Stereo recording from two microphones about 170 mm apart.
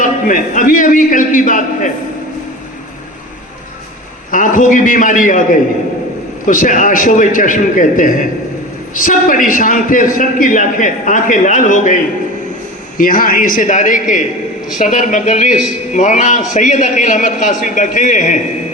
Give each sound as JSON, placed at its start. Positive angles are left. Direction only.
{"t": 0.0, "sound": "a man's voice", "side_deg": 50}
{"t": 4.3, "sound": "a man's voice", "side_deg": 50}
{"t": 13.0, "sound": "a man's voice", "side_deg": 55}